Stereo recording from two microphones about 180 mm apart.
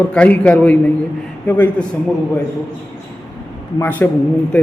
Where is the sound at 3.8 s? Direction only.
10° left (ahead or behind).